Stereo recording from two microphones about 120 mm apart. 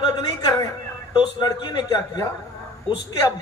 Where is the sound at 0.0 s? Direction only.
35° left (ahead or behind).